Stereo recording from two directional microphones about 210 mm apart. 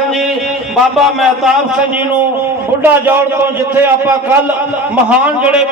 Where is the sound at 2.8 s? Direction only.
10° right (ahead or behind).